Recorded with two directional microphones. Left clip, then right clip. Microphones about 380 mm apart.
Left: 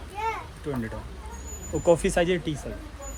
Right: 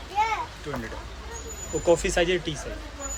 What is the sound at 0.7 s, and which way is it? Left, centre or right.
Speech, centre.